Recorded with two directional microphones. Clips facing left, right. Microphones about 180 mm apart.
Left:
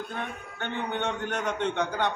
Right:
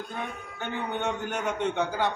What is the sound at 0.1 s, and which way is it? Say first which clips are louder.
A man's voice: even; 5° right (ahead or behind).